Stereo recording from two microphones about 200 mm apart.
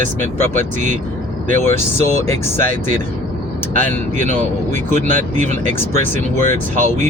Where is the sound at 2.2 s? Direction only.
10° left (ahead or behind).